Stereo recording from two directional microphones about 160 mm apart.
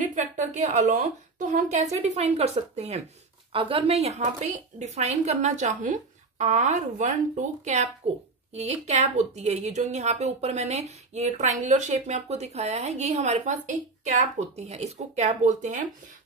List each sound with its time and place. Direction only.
0.0 s a woman's voice: 50° right (ahead or behind)